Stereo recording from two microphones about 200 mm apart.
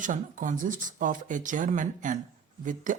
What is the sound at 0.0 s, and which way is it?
Speech, 40° right (ahead or behind).